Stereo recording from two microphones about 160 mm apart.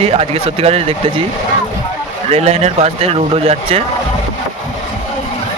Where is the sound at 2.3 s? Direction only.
40° right (ahead or behind).